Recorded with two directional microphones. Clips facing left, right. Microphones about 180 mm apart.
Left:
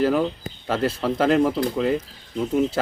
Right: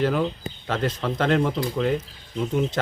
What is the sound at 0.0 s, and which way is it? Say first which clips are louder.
Speech: left 2 dB; 5° left (ahead or behind).